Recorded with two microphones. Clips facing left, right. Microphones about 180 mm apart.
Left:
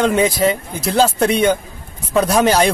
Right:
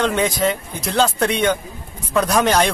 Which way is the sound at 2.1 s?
30° left (ahead or behind).